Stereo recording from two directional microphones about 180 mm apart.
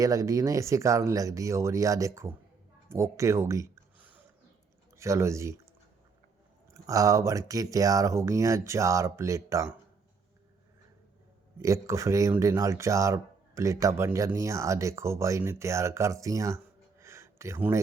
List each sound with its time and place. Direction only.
0.0 s speech: 20° right (ahead or behind)
6.8 s speech: 20° right (ahead or behind)
11.6 s speech: 15° right (ahead or behind)
17.0 s a sound: 15° right (ahead or behind)